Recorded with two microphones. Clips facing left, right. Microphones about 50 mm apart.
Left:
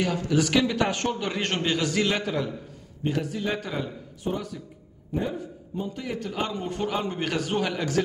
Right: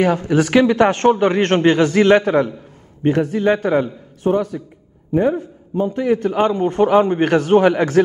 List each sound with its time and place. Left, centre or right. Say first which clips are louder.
0.0 s a man's voice: right 9 dB; right